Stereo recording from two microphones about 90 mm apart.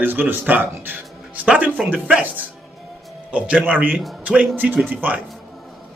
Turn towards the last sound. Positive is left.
turn(degrees=-20)  # may be behind; listen again after turning